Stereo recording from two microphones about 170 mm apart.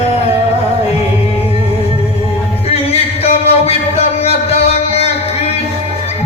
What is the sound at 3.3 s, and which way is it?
Music, 35° left (ahead or behind).